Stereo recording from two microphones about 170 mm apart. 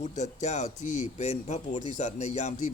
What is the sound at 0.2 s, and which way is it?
A man's voice, 45° left (ahead or behind).